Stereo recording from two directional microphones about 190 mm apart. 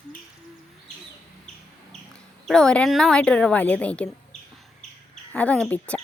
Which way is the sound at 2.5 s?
5° left (ahead or behind).